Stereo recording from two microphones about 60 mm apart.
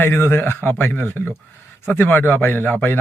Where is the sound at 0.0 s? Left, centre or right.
Left.